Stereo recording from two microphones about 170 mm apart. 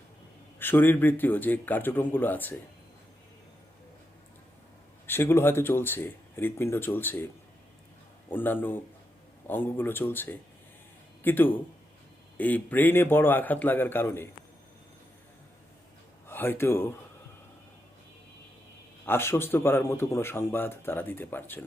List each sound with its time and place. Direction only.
0.6 s speech: 10° left (ahead or behind)
5.0 s speech: 15° left (ahead or behind)
8.3 s a man's voice: 10° left (ahead or behind)
16.2 s speech: 10° left (ahead or behind)
19.0 s speech: 15° left (ahead or behind)